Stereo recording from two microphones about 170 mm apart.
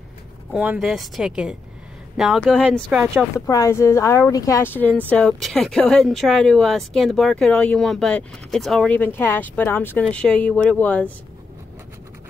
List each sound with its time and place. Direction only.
0.5 s speech: 5° right (ahead or behind)
3.3 s speech: 20° left (ahead or behind)